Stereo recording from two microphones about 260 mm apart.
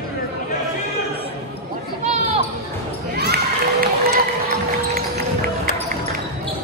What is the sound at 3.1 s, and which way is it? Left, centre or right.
Run, right.